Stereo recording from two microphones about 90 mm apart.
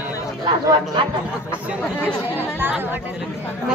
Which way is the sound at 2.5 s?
20° right (ahead or behind).